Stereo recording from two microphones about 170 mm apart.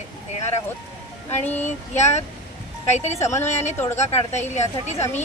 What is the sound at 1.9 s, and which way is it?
A woman's voice, 40° left (ahead or behind).